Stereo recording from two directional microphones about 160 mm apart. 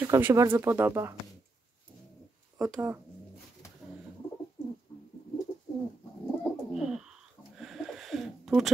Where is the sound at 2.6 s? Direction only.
5° right (ahead or behind).